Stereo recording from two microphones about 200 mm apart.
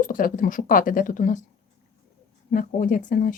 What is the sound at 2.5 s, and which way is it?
Speech, 45° left (ahead or behind).